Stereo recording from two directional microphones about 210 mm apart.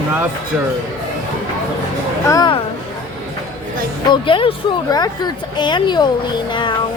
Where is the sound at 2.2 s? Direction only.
20° left (ahead or behind).